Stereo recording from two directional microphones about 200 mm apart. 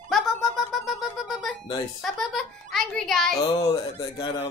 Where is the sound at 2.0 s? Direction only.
Centre (ahead or behind).